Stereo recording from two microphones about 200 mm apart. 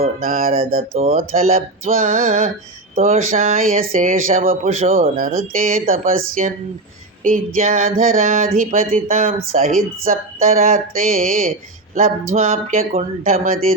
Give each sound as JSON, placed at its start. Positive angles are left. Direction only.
{"t": 0.0, "sound": "speech", "side_deg": -45}